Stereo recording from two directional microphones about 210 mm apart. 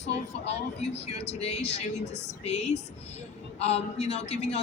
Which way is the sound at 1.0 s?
30° left (ahead or behind).